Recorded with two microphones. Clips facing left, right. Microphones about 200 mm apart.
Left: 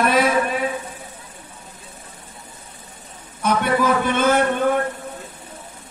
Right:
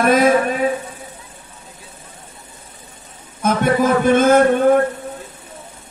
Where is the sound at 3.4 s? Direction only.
45° right (ahead or behind).